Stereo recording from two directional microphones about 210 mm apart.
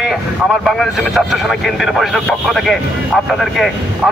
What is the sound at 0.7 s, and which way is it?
A man's voice, centre (ahead or behind).